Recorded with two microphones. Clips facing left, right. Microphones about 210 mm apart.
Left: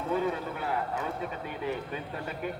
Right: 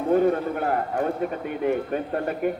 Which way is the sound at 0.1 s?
50° right (ahead or behind).